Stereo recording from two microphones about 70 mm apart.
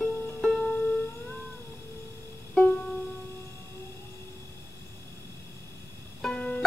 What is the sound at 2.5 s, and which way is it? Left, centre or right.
Music, centre.